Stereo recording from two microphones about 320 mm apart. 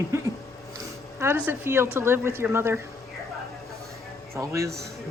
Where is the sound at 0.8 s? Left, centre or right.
Centre.